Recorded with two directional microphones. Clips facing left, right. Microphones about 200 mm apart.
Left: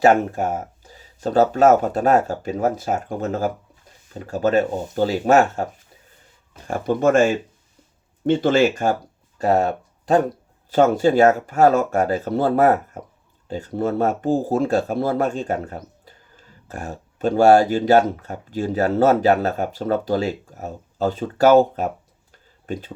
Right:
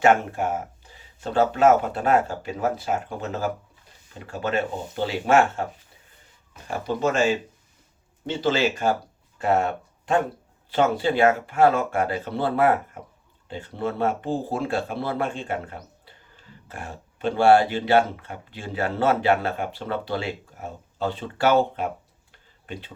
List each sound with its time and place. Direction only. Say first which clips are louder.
0.0 s speech: left 3 dB; 40° left (ahead or behind)
6.7 s speech: left 6 dB; 50° left (ahead or behind)
9.4 s speech: left 4 dB; 35° left (ahead or behind)